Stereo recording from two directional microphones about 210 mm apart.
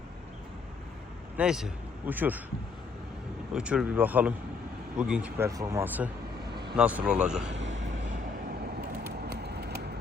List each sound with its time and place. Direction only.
1.4 s a man's voice: 5° right (ahead or behind)
3.5 s speech: 5° right (ahead or behind)
7.4 s speech: 60° right (ahead or behind)
8.9 s a sound: 50° right (ahead or behind)